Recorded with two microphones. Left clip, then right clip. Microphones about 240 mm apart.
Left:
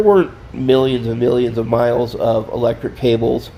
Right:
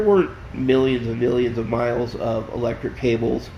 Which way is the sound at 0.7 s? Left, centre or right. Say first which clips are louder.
Left 5 dB; left.